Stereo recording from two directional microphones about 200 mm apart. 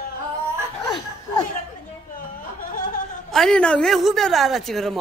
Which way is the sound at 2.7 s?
45° left (ahead or behind).